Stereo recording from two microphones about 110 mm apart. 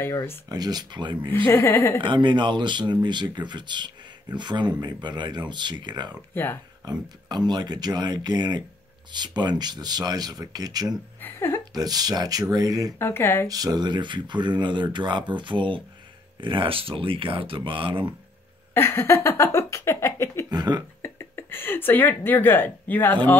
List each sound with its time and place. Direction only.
0.0 s a woman's voice: 20° left (ahead or behind)
0.5 s speech: 40° right (ahead or behind)
1.3 s a woman's voice: 20° left (ahead or behind)
2.0 s speech: 45° right (ahead or behind)
6.3 s a woman's voice: 20° left (ahead or behind)
6.8 s speech: 40° right (ahead or behind)
11.1 s a sound: 20° left (ahead or behind)
11.7 s speech: 35° right (ahead or behind)
13.0 s a woman's voice: 20° left (ahead or behind)
13.5 s speech: 35° right (ahead or behind); by 18.0 s 50° right (ahead or behind)
18.7 s a sound: 20° left (ahead or behind)
20.4 s speech: 40° right (ahead or behind)
21.0 s a sound: 20° left (ahead or behind)